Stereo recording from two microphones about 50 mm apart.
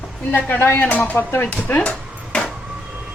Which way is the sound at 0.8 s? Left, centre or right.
Left.